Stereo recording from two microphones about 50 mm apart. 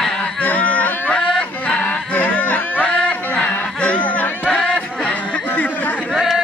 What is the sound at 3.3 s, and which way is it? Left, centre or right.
Music, left.